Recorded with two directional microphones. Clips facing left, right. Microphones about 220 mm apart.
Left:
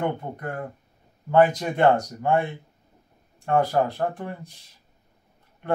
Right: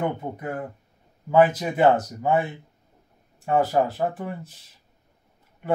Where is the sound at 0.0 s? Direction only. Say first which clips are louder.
Even; 5° right (ahead or behind).